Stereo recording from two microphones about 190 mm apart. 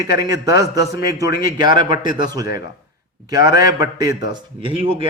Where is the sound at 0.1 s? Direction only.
15° right (ahead or behind).